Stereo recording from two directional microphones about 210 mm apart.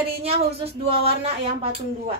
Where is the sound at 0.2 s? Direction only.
30° right (ahead or behind).